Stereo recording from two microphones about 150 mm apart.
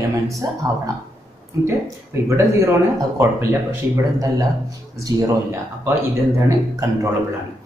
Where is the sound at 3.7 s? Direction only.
25° right (ahead or behind).